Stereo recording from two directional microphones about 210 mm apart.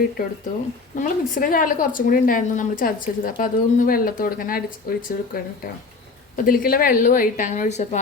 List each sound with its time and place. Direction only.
0.2 s a woman's voice: 45° left (ahead or behind)